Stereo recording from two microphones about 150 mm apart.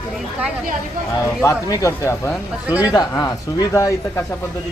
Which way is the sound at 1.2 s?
20° left (ahead or behind).